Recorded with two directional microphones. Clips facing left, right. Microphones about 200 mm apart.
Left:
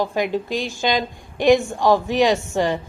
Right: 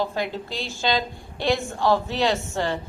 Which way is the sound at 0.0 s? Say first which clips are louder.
Left 5 dB; 15° left (ahead or behind).